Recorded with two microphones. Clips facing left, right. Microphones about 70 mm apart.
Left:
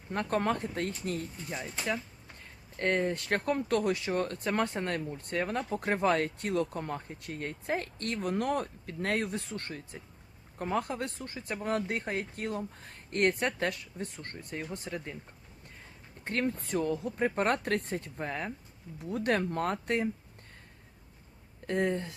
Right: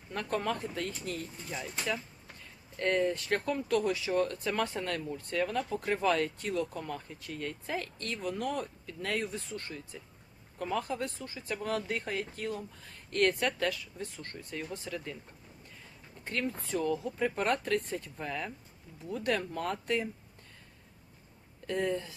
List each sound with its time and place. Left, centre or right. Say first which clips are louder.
0.1 s speech: left 3 dB; left
1.5 s speech: even; left
2.4 s speech: left 1 dB; left
14.3 s speech: left 1 dB; centre
16.2 s speech: left 3 dB; left
17.6 s speech: even; left
18.2 s speech: left 2 dB; left
21.7 s speech: left 2 dB; left